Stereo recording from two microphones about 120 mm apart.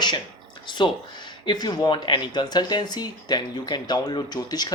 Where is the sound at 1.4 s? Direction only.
35° left (ahead or behind).